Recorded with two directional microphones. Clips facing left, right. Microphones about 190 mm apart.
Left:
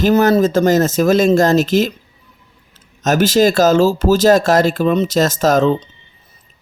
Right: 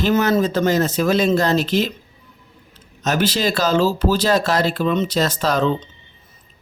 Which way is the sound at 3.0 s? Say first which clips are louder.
Left 7 dB; 45° left (ahead or behind).